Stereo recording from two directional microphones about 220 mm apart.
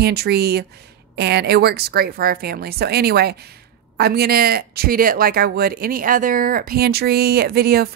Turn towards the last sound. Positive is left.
turn(degrees=-45)  # may be behind; listen again after turning